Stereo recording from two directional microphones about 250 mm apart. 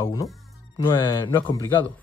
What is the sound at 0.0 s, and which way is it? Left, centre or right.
Speech, centre.